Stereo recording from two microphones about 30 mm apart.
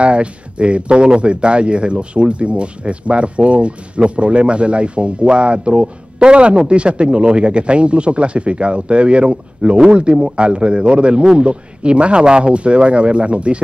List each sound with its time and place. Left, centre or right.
0.0 s speech: right